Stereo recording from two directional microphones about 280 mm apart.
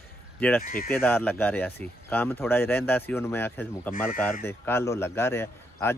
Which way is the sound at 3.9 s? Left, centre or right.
Left.